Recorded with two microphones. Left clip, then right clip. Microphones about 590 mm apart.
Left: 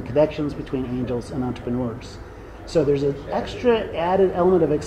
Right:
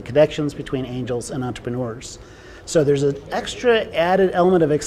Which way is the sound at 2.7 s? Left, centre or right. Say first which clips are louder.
Right 3 dB; right.